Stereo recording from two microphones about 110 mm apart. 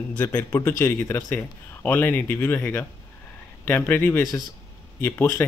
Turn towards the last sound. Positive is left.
turn(degrees=25)  # may be behind; listen again after turning